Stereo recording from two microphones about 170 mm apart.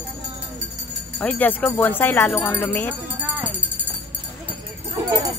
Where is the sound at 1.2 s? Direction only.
10° left (ahead or behind).